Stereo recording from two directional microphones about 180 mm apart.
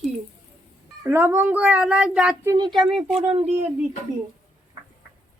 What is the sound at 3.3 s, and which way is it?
Speech, 35° right (ahead or behind).